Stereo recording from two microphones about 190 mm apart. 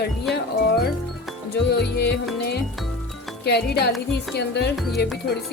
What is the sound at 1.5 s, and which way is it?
Speech, 60° left (ahead or behind).